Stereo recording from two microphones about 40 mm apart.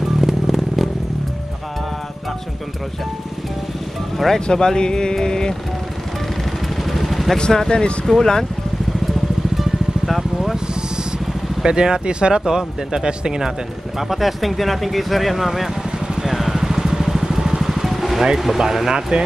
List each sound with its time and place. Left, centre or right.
0.0 s vehicle: centre
4.5 s speech: centre
6.8 s vehicle: centre
7.3 s speech: centre
9.6 s vehicle: centre
11.6 s speech: right
13.9 s speech: centre
16.2 s vehicle: centre
18.4 s speech: centre